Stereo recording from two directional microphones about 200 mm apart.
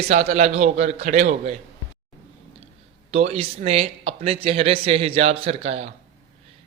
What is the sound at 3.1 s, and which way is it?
Speech, 30° right (ahead or behind).